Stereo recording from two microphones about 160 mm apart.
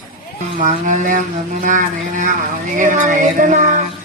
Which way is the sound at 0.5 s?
55° right (ahead or behind).